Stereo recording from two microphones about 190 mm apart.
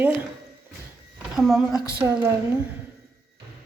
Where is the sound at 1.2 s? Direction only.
Centre (ahead or behind).